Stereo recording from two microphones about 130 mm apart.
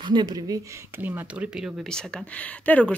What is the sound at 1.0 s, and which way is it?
Speech, 15° right (ahead or behind).